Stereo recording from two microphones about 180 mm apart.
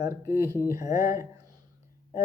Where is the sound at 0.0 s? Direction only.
15° right (ahead or behind).